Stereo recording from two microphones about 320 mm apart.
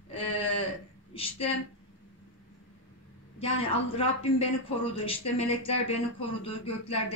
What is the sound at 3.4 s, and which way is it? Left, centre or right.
A man's voice, centre.